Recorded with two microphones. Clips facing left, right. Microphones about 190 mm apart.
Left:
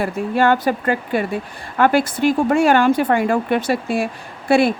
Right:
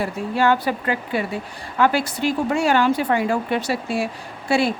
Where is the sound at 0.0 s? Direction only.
55° left (ahead or behind).